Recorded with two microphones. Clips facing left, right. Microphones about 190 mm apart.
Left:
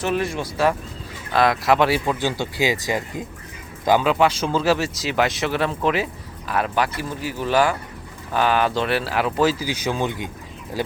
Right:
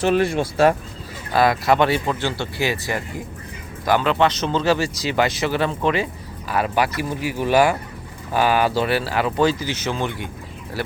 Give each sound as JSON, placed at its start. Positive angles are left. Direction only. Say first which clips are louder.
{"t": 0.0, "sound": "speech", "louder": "right 5 dB", "side_deg": -30}
{"t": 1.3, "sound": "speech", "louder": "right 1 dB", "side_deg": 0}
{"t": 2.4, "sound": "speech", "louder": "left 1 dB", "side_deg": 15}